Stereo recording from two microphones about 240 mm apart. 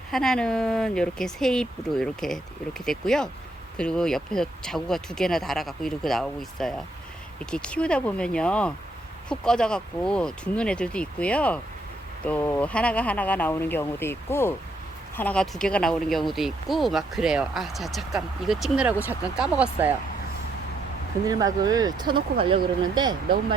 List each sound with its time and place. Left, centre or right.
0.1 s speech: centre
21.2 s speech: centre